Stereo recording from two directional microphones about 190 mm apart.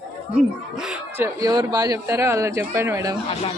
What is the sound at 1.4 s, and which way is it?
Speech, 20° right (ahead or behind).